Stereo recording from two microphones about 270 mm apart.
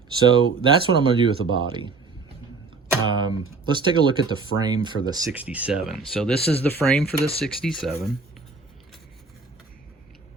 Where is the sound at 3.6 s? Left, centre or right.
Centre.